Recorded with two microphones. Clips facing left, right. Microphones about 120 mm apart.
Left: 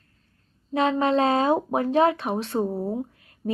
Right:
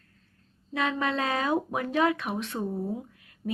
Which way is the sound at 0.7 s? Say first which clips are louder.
Left 7 dB; 30° left (ahead or behind).